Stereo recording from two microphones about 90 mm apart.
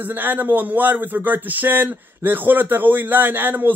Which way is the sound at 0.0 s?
20° right (ahead or behind).